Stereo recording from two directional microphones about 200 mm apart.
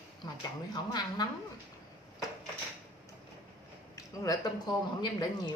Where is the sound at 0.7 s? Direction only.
20° left (ahead or behind).